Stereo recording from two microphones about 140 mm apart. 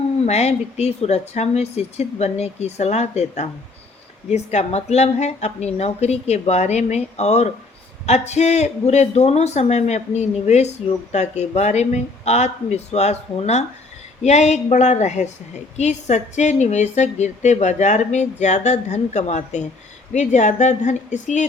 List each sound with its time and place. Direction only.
0.3 s a woman's voice: 50° left (ahead or behind)